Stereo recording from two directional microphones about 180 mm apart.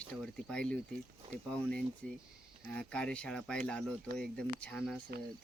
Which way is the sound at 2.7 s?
5° left (ahead or behind).